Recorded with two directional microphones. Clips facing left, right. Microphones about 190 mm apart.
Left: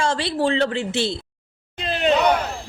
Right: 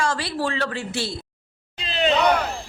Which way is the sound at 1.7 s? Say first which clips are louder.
Left 1 dB; 50° left (ahead or behind).